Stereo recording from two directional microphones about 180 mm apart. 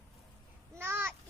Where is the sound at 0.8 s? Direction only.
10° right (ahead or behind).